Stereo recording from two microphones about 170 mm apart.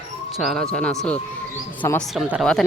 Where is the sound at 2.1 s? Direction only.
Centre (ahead or behind).